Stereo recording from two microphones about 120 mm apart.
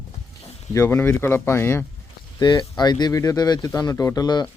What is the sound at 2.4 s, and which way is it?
Speech, 35° left (ahead or behind).